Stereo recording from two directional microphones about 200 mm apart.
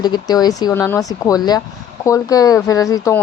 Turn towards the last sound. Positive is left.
turn(degrees=15)  # may be behind; listen again after turning